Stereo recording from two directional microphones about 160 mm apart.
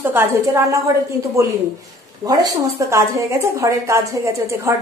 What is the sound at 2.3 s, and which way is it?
A woman's voice, 20° right (ahead or behind).